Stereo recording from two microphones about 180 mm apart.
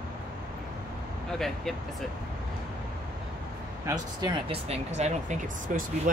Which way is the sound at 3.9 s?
25° right (ahead or behind).